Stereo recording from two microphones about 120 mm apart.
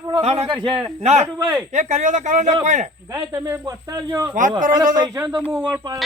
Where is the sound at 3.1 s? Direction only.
30° right (ahead or behind).